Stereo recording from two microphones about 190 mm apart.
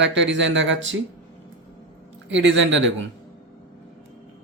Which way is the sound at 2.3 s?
75° right (ahead or behind).